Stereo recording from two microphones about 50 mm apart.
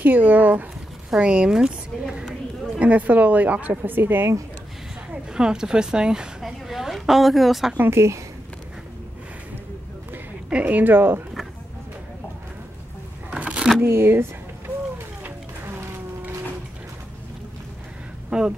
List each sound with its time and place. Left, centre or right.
0.0 s a woman's voice: right
1.2 s speech: centre
2.8 s a woman's voice: right
5.3 s speech: centre
6.4 s a woman's voice: centre
7.9 s speech: right
10.5 s a woman's voice: right
10.8 s speech: right
13.3 s a sound: right
13.8 s speech: right
15.2 s music: right
18.3 s speech: right